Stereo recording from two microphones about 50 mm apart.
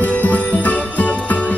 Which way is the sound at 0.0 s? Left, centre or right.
Left.